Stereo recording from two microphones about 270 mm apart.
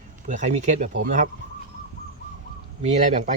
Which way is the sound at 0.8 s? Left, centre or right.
Right.